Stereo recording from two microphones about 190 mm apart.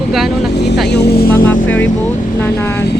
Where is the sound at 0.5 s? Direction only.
60° left (ahead or behind).